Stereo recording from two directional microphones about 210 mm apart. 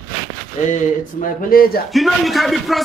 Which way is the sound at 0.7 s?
40° left (ahead or behind).